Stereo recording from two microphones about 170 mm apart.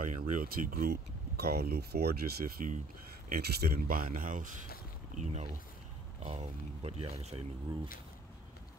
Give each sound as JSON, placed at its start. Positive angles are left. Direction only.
{"t": 0.0, "sound": "speech", "side_deg": -50}
{"t": 5.2, "sound": "speech", "side_deg": -40}